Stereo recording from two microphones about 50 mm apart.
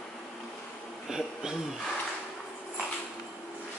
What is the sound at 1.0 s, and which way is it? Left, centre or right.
Speech, centre.